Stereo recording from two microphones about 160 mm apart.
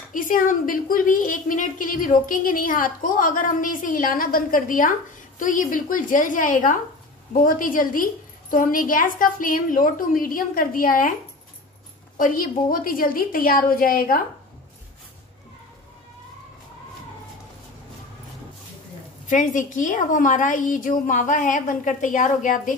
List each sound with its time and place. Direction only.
0.1 s a woman's voice: 60° left (ahead or behind)
12.2 s a woman's voice: 60° left (ahead or behind)
19.2 s a woman's voice: 55° left (ahead or behind)